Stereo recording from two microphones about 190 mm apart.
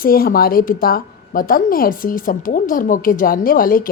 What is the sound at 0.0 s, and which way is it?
A woman's voice, 50° left (ahead or behind).